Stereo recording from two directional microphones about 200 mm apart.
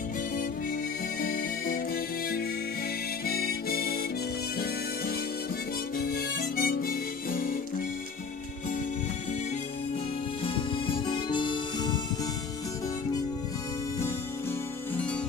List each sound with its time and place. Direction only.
1.2 s music: 45° left (ahead or behind)
3.3 s harmonica: 50° left (ahead or behind)
5.9 s harmonica: 50° left (ahead or behind)
11.1 s music: 25° left (ahead or behind)